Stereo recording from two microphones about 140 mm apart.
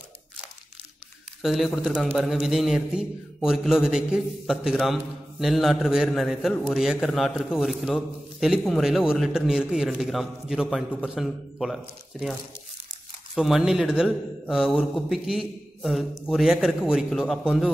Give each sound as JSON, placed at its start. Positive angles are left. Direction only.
{"t": 1.4, "sound": "a man's voice", "side_deg": 0}